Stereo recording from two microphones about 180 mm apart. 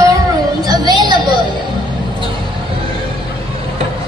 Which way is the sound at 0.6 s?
20° right (ahead or behind).